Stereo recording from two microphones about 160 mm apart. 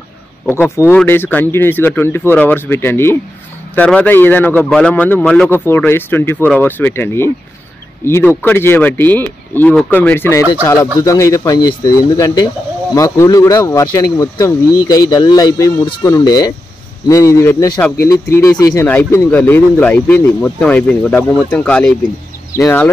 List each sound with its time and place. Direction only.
0.5 s speech: 15° left (ahead or behind)